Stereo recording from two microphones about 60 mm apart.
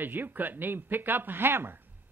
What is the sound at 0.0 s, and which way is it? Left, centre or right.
Speech, right.